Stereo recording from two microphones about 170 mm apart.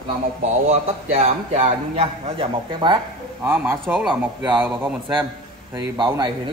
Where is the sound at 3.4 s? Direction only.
10° right (ahead or behind).